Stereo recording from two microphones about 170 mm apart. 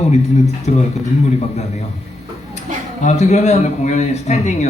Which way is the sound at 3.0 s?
40° left (ahead or behind).